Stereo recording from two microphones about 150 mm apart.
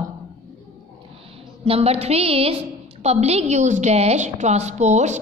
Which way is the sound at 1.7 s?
45° right (ahead or behind).